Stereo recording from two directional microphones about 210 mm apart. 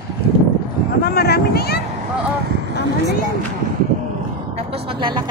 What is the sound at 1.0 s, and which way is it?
Speech, 50° left (ahead or behind).